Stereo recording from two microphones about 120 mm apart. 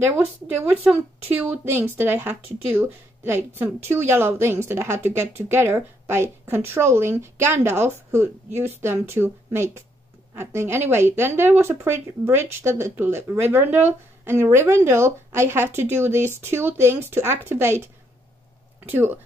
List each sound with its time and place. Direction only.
0.8 s a woman's voice: 15° right (ahead or behind)
18.9 s a woman's voice: 15° right (ahead or behind)